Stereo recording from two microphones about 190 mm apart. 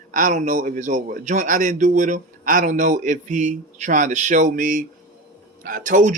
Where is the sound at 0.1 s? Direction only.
45° right (ahead or behind).